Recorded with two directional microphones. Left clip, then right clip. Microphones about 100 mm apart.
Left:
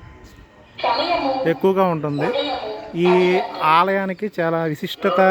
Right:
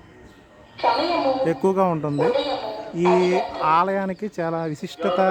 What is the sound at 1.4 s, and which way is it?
Speech, centre (ahead or behind).